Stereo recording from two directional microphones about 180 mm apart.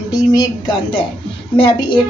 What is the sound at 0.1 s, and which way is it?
Speech, 20° left (ahead or behind).